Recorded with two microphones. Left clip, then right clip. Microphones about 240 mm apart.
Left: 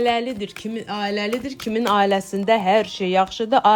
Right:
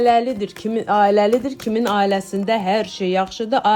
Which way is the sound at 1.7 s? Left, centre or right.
Centre.